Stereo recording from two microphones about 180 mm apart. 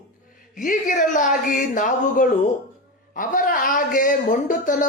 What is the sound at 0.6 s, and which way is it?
Speech, 45° left (ahead or behind).